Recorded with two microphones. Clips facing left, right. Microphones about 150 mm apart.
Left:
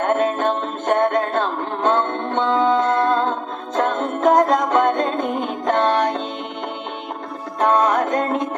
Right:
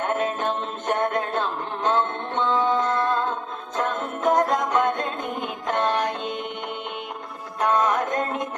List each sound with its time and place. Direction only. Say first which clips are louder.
0.0 s music: left 6 dB; 50° left (ahead or behind)
7.7 s music: left 4 dB; 45° left (ahead or behind)